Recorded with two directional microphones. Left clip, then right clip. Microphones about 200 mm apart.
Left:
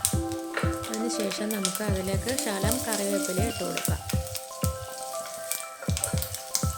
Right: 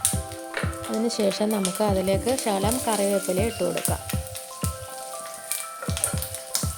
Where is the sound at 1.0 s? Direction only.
20° right (ahead or behind).